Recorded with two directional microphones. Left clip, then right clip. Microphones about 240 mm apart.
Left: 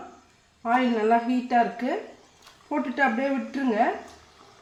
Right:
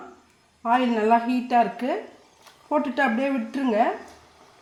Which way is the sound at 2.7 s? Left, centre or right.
Right.